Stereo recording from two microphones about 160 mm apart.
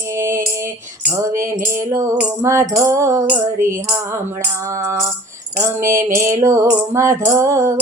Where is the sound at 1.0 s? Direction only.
15° right (ahead or behind).